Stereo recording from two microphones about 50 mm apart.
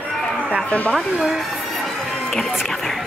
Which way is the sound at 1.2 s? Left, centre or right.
Centre.